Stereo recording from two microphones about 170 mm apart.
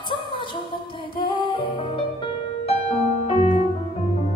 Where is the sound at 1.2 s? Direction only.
30° left (ahead or behind).